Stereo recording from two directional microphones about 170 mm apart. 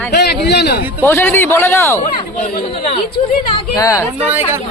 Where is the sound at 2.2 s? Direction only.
35° left (ahead or behind).